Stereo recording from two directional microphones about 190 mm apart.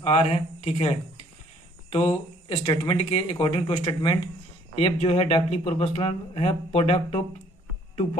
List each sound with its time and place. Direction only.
0.0 s speech: 30° left (ahead or behind)